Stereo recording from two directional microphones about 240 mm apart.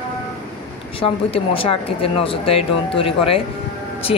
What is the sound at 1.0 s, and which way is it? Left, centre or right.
Speech, left.